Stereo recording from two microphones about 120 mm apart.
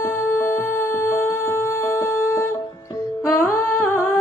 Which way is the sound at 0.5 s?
20° left (ahead or behind).